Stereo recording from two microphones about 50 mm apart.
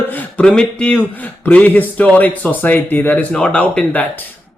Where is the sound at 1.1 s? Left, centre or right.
Left.